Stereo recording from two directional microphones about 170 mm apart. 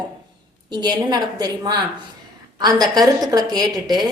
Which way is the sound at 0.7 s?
25° right (ahead or behind).